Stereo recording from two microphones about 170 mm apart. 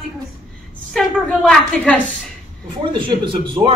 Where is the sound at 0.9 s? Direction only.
5° left (ahead or behind).